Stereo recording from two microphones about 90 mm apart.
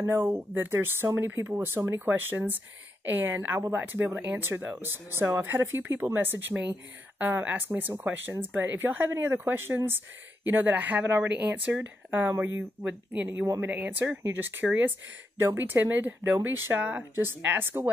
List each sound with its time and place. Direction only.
0.0 s speech: 20° right (ahead or behind)